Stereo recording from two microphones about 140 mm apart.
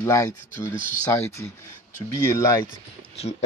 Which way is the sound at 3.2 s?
45° left (ahead or behind).